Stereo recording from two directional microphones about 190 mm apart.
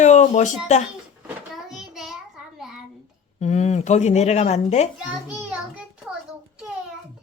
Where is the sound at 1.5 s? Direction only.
Centre (ahead or behind).